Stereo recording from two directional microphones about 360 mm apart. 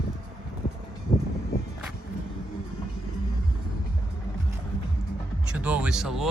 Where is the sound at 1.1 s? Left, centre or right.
Left.